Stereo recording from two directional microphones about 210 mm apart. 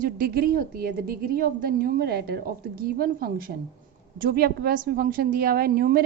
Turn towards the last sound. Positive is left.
turn(degrees=-45)  # may be behind; listen again after turning